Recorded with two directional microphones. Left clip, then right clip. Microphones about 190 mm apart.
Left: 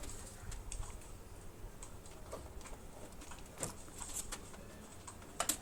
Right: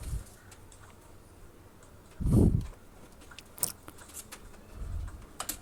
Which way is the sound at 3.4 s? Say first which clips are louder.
Right 6 dB; 40° right (ahead or behind).